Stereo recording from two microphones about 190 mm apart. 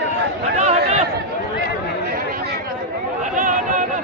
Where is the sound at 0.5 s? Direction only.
35° right (ahead or behind).